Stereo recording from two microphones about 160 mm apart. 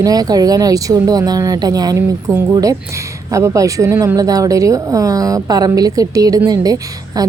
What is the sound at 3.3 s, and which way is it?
Speech, 20° right (ahead or behind).